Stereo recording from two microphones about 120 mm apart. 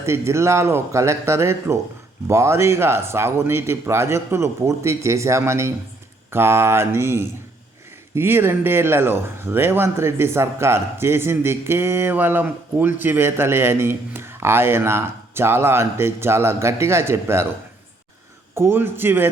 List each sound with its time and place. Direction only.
0.0 s speech: 20° right (ahead or behind)
18.5 s speech: 20° right (ahead or behind)